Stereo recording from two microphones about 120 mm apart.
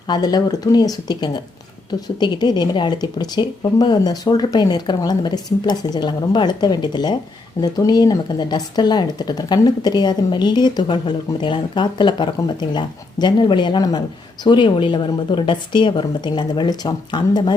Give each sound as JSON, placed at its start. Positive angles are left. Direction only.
{"t": 0.1, "sound": "speech", "side_deg": 35}